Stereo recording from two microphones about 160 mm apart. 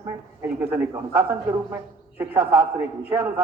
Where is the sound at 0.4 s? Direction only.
10° right (ahead or behind).